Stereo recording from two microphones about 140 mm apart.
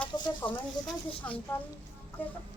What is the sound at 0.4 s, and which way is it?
Speech, 35° left (ahead or behind).